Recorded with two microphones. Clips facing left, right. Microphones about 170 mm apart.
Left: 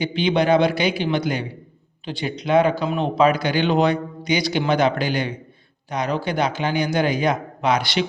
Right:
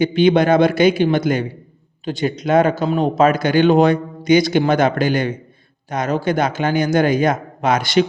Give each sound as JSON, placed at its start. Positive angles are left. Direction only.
{"t": 0.0, "sound": "speech", "side_deg": -50}